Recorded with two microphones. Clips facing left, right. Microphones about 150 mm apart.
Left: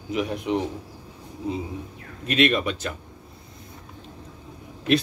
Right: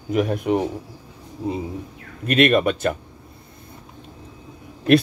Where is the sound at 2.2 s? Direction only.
55° right (ahead or behind).